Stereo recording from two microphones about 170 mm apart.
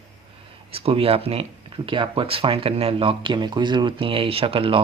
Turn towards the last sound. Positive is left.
turn(degrees=-30)  # may be behind; listen again after turning